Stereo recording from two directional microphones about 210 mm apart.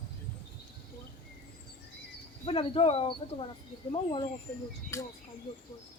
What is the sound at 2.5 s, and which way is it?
Speech, 25° left (ahead or behind).